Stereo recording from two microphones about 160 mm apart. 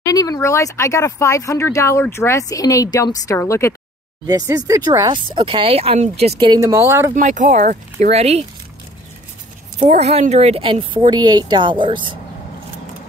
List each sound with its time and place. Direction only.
0.0 s speech: 20° left (ahead or behind)
4.3 s speech: 20° right (ahead or behind); by 6.3 s 40° right (ahead or behind)
6.4 s speech: 25° right (ahead or behind)
7.2 s speech: 50° right (ahead or behind)
9.8 s speech: 45° right (ahead or behind)